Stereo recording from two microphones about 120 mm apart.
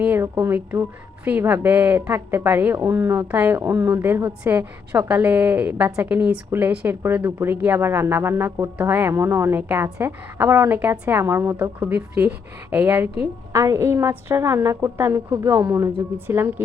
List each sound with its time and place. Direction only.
0.0 s a woman's voice: 15° right (ahead or behind)